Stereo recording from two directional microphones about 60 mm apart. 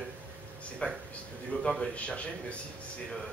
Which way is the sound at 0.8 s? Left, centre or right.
Left.